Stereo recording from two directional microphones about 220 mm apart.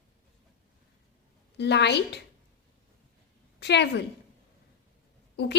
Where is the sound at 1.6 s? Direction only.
50° left (ahead or behind).